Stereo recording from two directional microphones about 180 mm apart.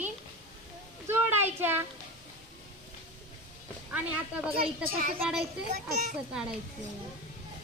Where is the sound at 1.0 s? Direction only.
10° right (ahead or behind).